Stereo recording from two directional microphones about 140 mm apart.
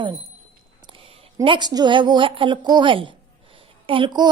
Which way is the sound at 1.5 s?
30° right (ahead or behind).